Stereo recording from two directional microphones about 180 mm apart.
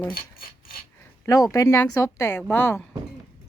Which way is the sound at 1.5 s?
15° left (ahead or behind).